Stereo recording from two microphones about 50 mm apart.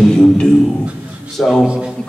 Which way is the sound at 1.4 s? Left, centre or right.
Centre.